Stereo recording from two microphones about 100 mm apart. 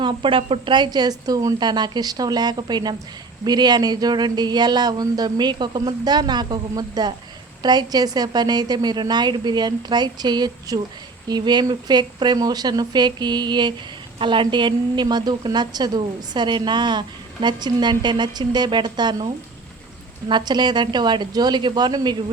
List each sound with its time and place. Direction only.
0.0 s a woman's voice: 55° right (ahead or behind)